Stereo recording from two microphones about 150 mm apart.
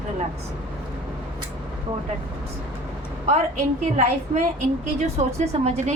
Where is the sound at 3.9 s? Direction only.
50° right (ahead or behind).